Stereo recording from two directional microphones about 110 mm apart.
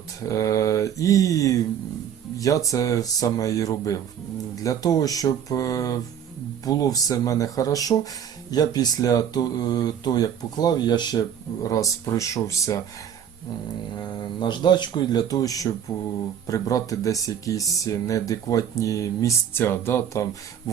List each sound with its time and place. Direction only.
0.2 s speech: 30° left (ahead or behind)
14.2 s speech: 45° left (ahead or behind); by 20.2 s 20° left (ahead or behind)